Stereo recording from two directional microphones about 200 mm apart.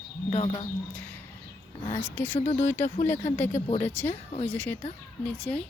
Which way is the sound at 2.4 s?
35° left (ahead or behind).